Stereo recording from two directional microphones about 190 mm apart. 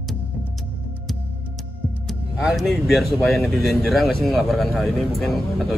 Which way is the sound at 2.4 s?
Centre (ahead or behind).